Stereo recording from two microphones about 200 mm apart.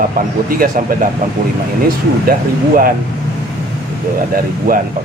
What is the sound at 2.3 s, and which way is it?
Speech, 45° right (ahead or behind).